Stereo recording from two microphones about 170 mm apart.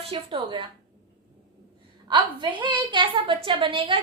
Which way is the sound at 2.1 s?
25° right (ahead or behind).